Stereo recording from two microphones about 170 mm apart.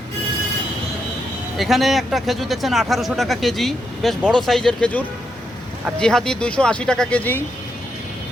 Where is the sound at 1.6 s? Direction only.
Centre (ahead or behind).